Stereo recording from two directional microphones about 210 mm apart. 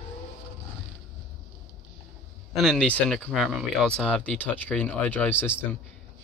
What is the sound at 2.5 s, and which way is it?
Speech, centre (ahead or behind).